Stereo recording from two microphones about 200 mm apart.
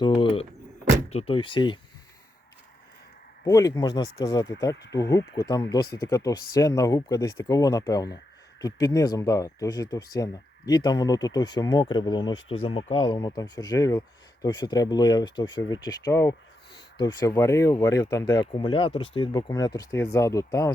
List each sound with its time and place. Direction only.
0.0 s speech: 25° left (ahead or behind)
3.4 s speech: 15° left (ahead or behind)